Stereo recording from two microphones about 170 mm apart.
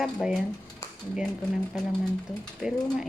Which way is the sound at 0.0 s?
Centre (ahead or behind).